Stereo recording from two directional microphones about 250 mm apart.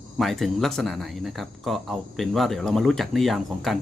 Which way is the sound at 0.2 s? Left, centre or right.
Centre.